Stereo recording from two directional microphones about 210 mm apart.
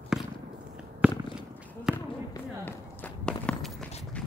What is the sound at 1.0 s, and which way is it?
Purr, 5° right (ahead or behind).